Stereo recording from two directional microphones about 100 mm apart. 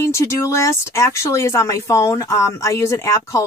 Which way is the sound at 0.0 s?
30° left (ahead or behind).